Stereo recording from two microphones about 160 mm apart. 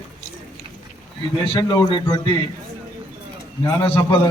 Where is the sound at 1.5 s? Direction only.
25° left (ahead or behind).